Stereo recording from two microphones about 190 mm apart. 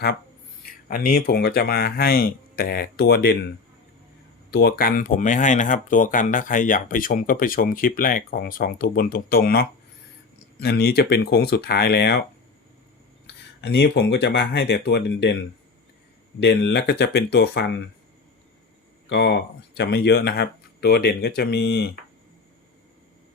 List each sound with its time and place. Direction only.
0.6 s speech: 50° left (ahead or behind)
4.5 s speech: 55° left (ahead or behind)
13.6 s speech: 65° left (ahead or behind)
16.4 s speech: 60° left (ahead or behind)
19.0 s speech: 65° left (ahead or behind)